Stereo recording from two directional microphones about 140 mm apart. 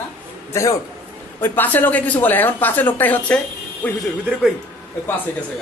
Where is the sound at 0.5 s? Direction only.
25° left (ahead or behind).